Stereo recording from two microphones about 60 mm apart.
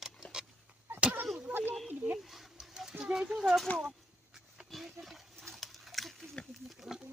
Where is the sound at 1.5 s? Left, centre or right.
Right.